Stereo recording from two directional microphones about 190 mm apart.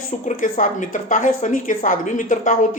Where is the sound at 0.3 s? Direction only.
40° left (ahead or behind).